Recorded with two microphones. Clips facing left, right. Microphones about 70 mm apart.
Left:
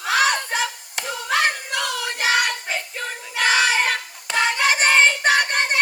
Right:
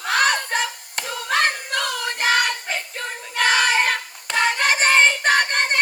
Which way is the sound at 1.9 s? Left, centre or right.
Centre.